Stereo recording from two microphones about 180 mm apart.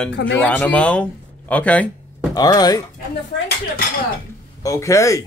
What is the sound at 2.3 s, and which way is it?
Speech, 20° left (ahead or behind).